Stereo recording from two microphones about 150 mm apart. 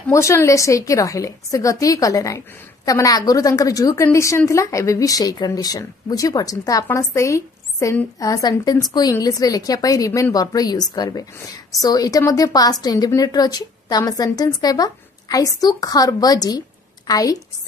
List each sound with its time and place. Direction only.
0.1 s a woman's voice: 20° left (ahead or behind)